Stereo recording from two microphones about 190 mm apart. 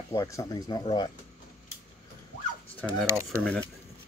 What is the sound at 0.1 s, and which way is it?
Speech, 20° left (ahead or behind).